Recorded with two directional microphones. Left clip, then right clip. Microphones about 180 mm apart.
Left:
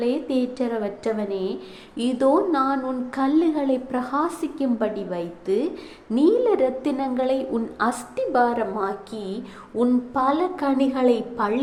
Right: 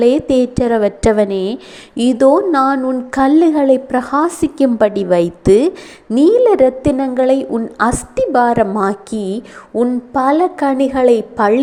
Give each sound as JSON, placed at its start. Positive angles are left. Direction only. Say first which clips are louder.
{"t": 0.0, "sound": "a woman's voice", "louder": "right 12 dB", "side_deg": -45}
{"t": 2.0, "sound": "a woman's voice", "louder": "right 9 dB", "side_deg": -35}